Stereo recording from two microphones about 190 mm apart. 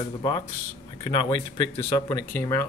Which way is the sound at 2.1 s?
10° left (ahead or behind).